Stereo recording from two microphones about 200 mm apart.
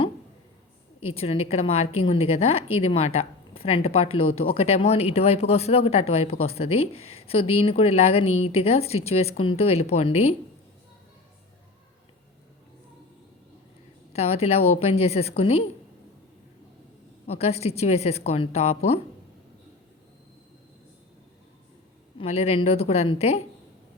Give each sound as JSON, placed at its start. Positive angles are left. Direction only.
{"t": 1.1, "sound": "speech", "side_deg": 30}
{"t": 14.1, "sound": "speech", "side_deg": 30}
{"t": 17.2, "sound": "speech", "side_deg": 30}
{"t": 22.2, "sound": "speech", "side_deg": 30}